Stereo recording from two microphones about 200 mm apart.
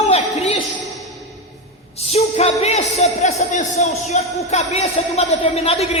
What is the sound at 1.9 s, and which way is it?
Music, 30° left (ahead or behind).